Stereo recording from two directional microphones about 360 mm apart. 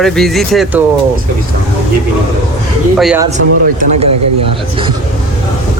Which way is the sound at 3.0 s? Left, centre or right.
Centre.